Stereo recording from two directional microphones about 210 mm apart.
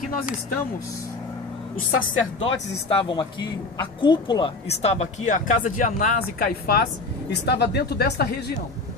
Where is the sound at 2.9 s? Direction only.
25° left (ahead or behind); by 8.5 s 50° left (ahead or behind).